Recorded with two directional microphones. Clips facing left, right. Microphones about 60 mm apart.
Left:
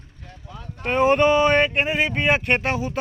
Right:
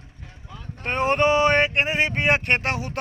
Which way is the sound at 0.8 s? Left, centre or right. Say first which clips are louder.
Left 3 dB; centre.